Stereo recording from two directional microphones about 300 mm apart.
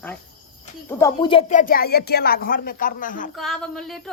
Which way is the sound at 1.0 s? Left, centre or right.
Centre.